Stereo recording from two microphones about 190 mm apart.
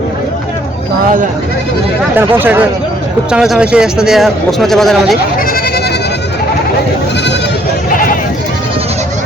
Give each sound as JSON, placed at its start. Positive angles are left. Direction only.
{"t": 2.1, "sound": "a man's voice", "side_deg": -10}
{"t": 7.9, "sound": "sheep", "side_deg": 45}